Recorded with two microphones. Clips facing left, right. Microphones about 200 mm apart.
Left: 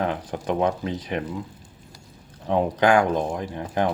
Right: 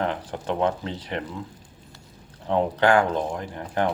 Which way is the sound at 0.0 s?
15° left (ahead or behind).